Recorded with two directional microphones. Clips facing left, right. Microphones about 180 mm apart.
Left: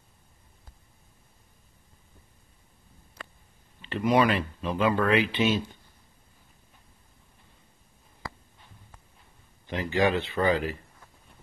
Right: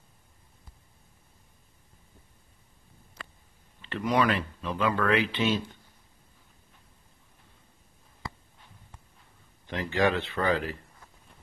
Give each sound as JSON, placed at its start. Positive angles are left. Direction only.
{"t": 3.8, "sound": "speech", "side_deg": 15}
{"t": 9.7, "sound": "speech", "side_deg": 5}